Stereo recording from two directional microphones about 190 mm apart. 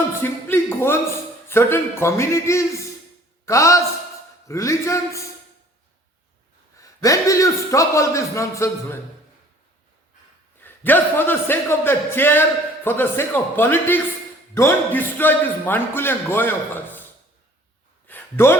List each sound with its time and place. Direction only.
0.2 s a man's voice: 10° left (ahead or behind)
6.7 s a man's voice: 15° left (ahead or behind)
10.6 s a man's voice: 10° left (ahead or behind)
18.1 s a sound: 10° left (ahead or behind)